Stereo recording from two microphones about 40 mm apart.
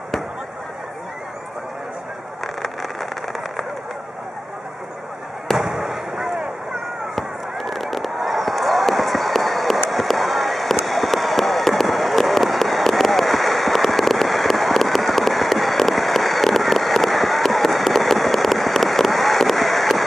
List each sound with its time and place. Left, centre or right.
2.4 s vehicle: centre
5.7 s fireworks: centre
7.2 s fireworks: centre